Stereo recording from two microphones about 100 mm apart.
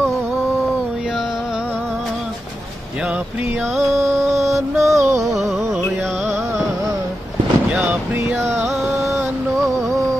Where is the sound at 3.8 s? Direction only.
30° right (ahead or behind).